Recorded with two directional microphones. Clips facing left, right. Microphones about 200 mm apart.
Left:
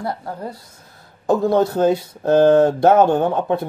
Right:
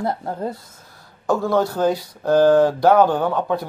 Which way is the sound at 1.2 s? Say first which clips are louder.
Left 3 dB; 20° left (ahead or behind).